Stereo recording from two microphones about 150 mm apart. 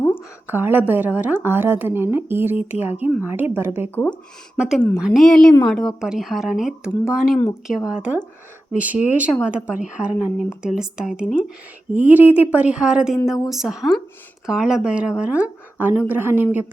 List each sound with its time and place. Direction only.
0.4 s speech: 15° right (ahead or behind)
3.9 s speech: 10° left (ahead or behind)
4.5 s speech: 5° right (ahead or behind)